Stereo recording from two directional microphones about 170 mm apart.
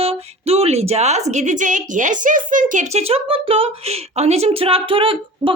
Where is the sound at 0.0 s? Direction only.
35° right (ahead or behind).